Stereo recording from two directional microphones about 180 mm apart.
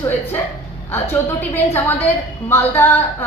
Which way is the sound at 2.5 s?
15° left (ahead or behind).